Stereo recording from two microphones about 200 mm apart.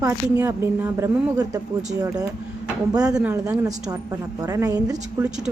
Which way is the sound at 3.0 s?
5° right (ahead or behind).